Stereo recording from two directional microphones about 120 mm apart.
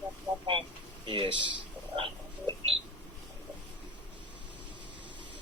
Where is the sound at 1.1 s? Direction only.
45° right (ahead or behind).